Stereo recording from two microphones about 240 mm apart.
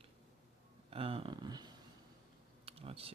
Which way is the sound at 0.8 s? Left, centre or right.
Right.